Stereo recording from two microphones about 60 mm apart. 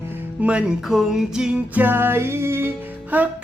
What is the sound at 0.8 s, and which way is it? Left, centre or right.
Music, centre.